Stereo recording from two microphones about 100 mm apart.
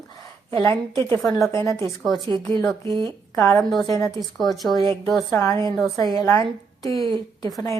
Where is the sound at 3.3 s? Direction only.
25° left (ahead or behind).